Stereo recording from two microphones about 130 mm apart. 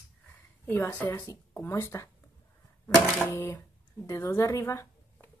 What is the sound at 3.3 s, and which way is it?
Speech, 20° left (ahead or behind).